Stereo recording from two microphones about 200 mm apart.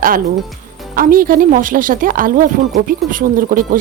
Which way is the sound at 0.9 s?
45° right (ahead or behind).